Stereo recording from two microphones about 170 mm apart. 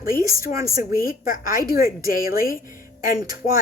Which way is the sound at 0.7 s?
55° left (ahead or behind).